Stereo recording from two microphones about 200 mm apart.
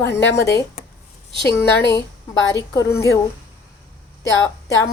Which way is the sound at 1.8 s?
60° left (ahead or behind).